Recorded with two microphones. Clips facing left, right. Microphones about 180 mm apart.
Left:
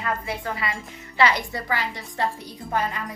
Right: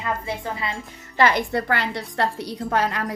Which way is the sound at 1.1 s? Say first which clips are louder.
Right 3 dB; 50° right (ahead or behind).